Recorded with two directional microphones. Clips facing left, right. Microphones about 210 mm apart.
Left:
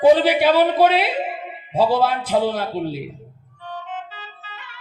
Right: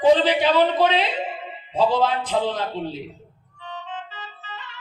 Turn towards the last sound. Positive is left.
turn(degrees=10)  # may be behind; listen again after turning